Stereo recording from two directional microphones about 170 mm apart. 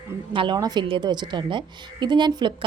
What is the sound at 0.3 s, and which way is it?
A woman's voice, 25° right (ahead or behind).